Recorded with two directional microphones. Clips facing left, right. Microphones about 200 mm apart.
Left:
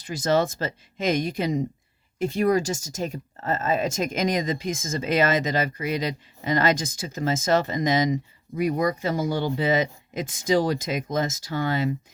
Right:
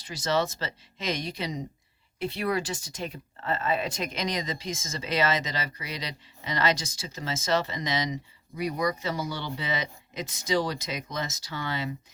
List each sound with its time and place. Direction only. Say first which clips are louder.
0.0 s speech: left 5 dB; 50° left (ahead or behind)